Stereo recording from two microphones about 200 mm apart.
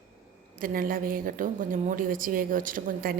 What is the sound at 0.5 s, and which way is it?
A woman's voice, 45° right (ahead or behind).